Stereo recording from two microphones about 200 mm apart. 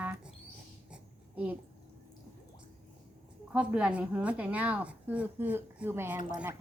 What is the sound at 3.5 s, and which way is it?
A woman's voice, 5° right (ahead or behind).